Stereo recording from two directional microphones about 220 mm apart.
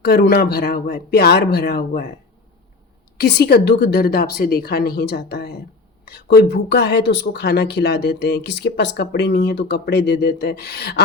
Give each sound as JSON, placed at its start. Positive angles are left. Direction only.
{"t": 0.0, "sound": "speech", "side_deg": 45}
{"t": 3.2, "sound": "speech", "side_deg": 50}